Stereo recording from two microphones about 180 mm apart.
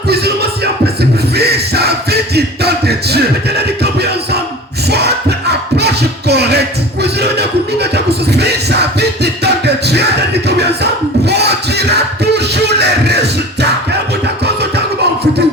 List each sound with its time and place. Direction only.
0.1 s music: 65° right (ahead or behind)
4.9 s a sound: 65° right (ahead or behind)
11.3 s music: 65° right (ahead or behind)